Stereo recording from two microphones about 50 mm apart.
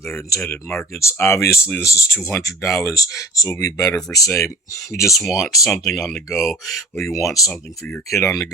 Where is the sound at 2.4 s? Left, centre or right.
Left.